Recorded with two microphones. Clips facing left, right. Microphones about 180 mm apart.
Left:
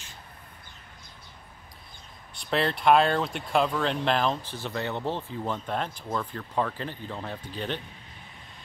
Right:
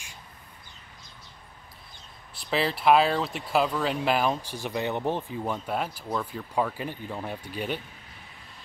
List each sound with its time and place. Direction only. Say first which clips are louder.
2.3 s speech: even; centre (ahead or behind)